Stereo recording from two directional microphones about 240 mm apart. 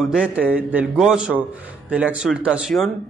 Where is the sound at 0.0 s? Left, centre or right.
Centre.